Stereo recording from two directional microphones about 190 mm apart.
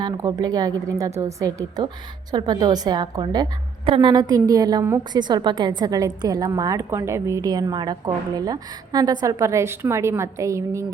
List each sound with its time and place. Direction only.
0.0 s a woman's voice: 20° right (ahead or behind)